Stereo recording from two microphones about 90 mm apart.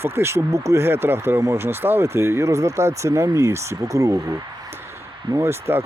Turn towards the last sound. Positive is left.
turn(degrees=-30)  # may be behind; listen again after turning